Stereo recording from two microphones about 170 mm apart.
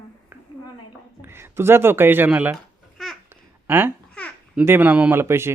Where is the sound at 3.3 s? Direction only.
10° right (ahead or behind).